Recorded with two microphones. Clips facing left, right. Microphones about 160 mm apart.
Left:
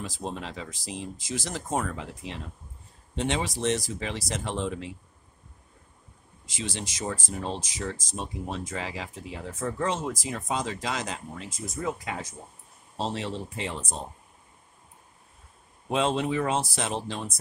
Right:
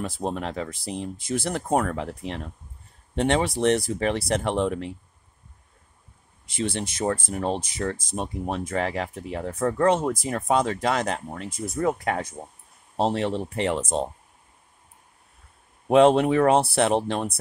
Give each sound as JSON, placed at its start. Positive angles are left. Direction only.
{"t": 0.0, "sound": "speech", "side_deg": -55}
{"t": 6.4, "sound": "speech", "side_deg": -60}
{"t": 15.9, "sound": "speech", "side_deg": -60}